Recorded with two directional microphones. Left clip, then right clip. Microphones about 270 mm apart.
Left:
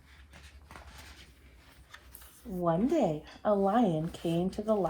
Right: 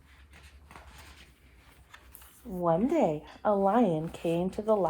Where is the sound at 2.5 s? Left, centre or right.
Right.